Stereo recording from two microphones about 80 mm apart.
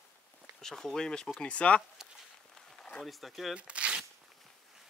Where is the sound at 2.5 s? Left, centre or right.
Centre.